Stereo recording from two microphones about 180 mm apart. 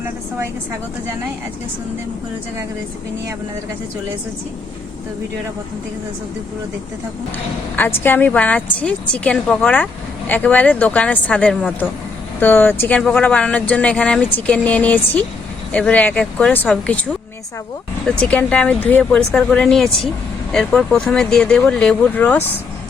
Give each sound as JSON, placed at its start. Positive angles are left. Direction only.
{"t": 7.8, "sound": "a woman's voice", "side_deg": 10}
{"t": 18.1, "sound": "a woman's voice", "side_deg": 5}